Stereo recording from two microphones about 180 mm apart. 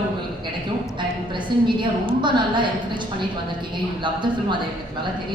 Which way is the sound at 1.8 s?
25° right (ahead or behind).